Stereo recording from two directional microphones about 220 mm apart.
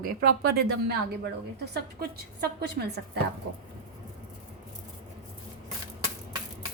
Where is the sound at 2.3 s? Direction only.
50° right (ahead or behind).